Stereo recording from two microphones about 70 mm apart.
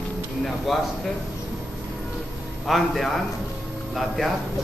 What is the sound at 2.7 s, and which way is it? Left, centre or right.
Speech, centre.